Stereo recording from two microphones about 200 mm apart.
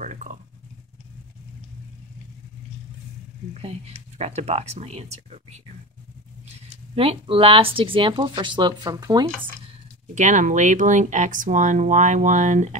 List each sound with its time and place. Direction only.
0.0 s a sound: 35° right (ahead or behind)
3.5 s speech: 30° right (ahead or behind)
7.0 s speech: 25° right (ahead or behind)
10.1 s speech: 40° right (ahead or behind)